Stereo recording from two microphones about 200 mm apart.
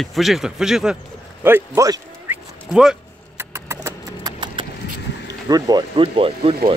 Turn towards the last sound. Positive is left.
turn(degrees=-25)  # may be behind; listen again after turning